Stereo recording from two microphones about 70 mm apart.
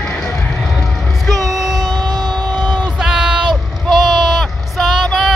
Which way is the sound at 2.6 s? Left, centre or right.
Centre.